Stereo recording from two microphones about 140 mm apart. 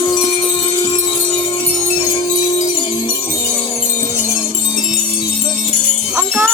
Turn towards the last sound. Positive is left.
turn(degrees=-10)  # may be behind; listen again after turning